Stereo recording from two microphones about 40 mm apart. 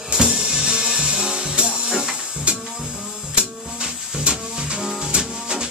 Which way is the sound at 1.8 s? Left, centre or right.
Centre.